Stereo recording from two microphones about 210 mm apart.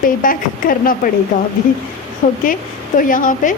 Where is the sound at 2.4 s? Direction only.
40° left (ahead or behind).